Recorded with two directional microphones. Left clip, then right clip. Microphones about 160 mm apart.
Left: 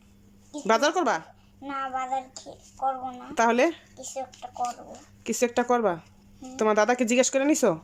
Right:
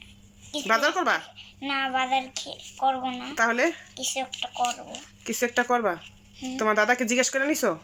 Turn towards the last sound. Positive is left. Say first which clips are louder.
# left 2 dB
turn(degrees=20)  # may be behind; listen again after turning